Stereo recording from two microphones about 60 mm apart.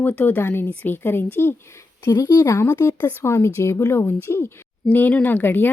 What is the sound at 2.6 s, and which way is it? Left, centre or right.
Speech, left.